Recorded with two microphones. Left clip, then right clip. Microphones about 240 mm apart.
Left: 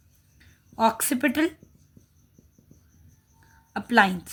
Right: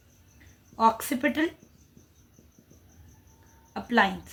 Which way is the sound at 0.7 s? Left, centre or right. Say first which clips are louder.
Even; left.